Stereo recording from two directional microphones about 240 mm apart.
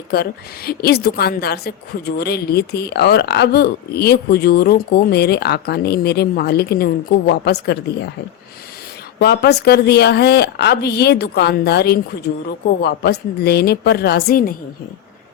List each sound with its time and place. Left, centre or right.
0.1 s a woman's voice: left
9.1 s a woman's voice: left